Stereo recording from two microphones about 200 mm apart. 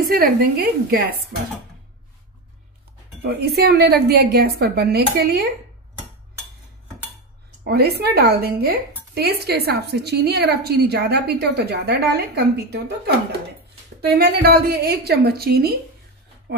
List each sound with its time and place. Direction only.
0.0 s a woman's voice: 45° right (ahead or behind)
3.2 s a woman's voice: 55° right (ahead or behind)
7.6 s a woman's voice: 50° right (ahead or behind)